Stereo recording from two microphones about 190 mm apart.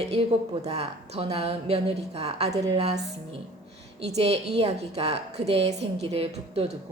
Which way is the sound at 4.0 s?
35° right (ahead or behind).